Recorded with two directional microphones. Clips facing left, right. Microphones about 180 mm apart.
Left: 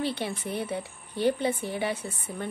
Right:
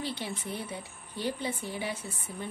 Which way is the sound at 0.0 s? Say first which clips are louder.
Left 5 dB; 60° left (ahead or behind).